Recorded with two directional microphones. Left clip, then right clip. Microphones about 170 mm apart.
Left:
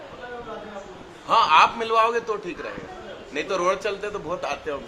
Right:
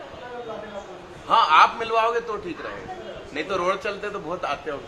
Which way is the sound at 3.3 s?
40° left (ahead or behind).